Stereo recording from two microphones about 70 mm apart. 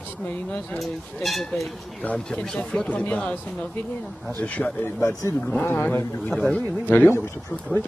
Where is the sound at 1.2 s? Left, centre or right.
Centre.